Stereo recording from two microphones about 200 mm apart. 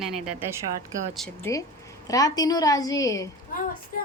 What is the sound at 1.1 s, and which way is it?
Speech, centre (ahead or behind).